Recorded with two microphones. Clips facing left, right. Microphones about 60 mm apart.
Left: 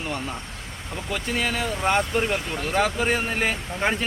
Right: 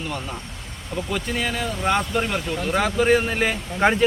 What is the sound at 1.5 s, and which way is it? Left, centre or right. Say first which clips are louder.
Speech: even; left.